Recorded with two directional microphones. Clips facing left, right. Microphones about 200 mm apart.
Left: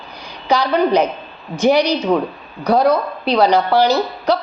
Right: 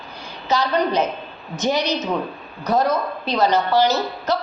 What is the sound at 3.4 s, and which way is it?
Speech, 15° left (ahead or behind).